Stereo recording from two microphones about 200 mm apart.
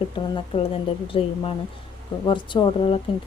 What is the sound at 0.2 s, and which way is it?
A woman's voice, 25° left (ahead or behind).